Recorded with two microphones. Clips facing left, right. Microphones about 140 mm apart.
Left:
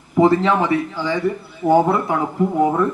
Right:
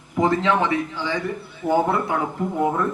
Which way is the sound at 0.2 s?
35° left (ahead or behind).